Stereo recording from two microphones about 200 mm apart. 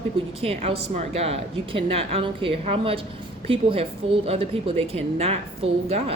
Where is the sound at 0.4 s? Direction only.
30° right (ahead or behind).